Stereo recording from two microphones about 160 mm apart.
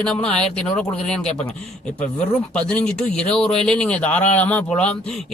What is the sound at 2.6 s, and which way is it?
Speech, 5° left (ahead or behind).